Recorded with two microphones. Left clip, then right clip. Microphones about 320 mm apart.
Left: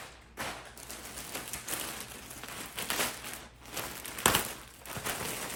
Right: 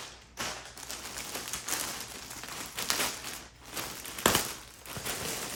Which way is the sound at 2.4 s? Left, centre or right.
Centre.